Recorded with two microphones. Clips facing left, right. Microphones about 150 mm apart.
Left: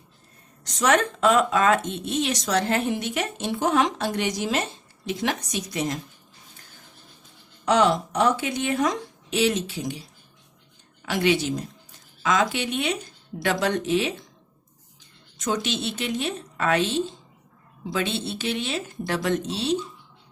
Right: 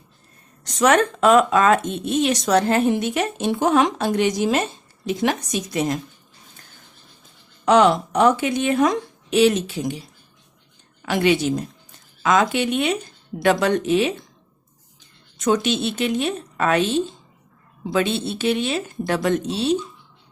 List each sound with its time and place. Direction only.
0.6 s speech: 55° right (ahead or behind)
7.6 s speech: 60° right (ahead or behind)
11.0 s speech: 55° right (ahead or behind)
15.4 s speech: 55° right (ahead or behind)
17.9 s speech: 55° right (ahead or behind)